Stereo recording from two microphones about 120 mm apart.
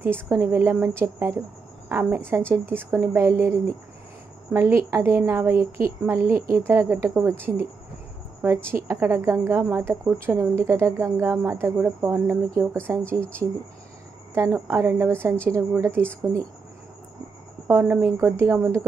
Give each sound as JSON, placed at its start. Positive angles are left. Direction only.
{"t": 0.0, "sound": "speech", "side_deg": -20}
{"t": 8.6, "sound": "speech", "side_deg": -20}
{"t": 12.4, "sound": "speech", "side_deg": 10}
{"t": 14.3, "sound": "speech", "side_deg": -20}
{"t": 17.6, "sound": "speech", "side_deg": -15}